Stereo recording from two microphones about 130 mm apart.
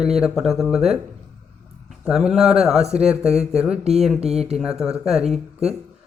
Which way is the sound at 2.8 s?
55° right (ahead or behind).